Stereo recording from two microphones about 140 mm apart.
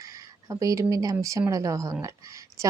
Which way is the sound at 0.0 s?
25° right (ahead or behind).